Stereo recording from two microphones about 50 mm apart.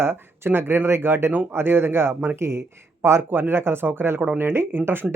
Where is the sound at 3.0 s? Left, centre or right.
Right.